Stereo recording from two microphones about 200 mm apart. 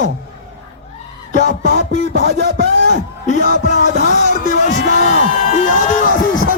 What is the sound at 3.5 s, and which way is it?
Music, 35° left (ahead or behind).